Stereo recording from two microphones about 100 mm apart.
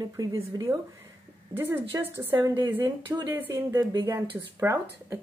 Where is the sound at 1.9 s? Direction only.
35° right (ahead or behind).